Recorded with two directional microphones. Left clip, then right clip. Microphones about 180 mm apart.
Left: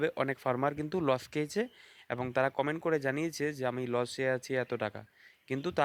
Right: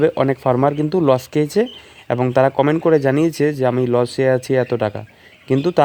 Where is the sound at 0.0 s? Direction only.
20° left (ahead or behind).